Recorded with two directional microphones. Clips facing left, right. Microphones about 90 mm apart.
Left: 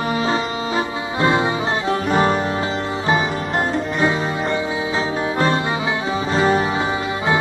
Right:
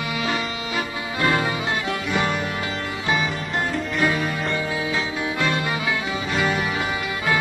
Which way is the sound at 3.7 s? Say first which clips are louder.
Left 1 dB; 30° left (ahead or behind).